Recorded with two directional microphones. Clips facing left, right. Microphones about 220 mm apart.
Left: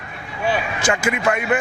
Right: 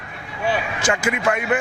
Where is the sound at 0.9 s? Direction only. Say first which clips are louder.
Left 1 dB; 20° left (ahead or behind).